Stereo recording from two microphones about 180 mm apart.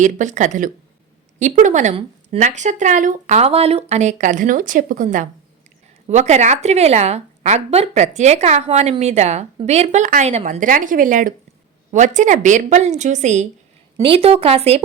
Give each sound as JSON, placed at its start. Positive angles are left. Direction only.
{"t": 0.0, "sound": "a woman's voice", "side_deg": -45}